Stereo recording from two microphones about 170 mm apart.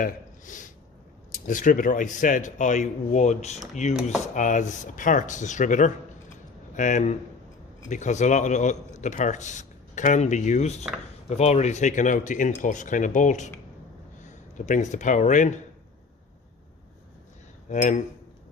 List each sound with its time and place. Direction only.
0.0 s a sound: 50° left (ahead or behind)
1.5 s a man's voice: 50° left (ahead or behind)
17.7 s a man's voice: 50° left (ahead or behind)